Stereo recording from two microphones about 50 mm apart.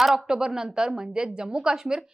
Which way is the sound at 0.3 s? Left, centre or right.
Centre.